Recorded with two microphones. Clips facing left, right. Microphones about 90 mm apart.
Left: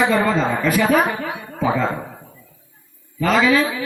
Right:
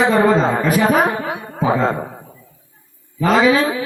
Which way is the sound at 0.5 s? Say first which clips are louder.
Right 2 dB; 35° right (ahead or behind).